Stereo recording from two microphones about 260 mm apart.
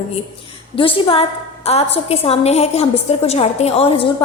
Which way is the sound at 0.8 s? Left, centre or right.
Centre.